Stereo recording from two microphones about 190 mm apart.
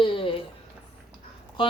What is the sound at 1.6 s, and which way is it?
Speech, 25° left (ahead or behind).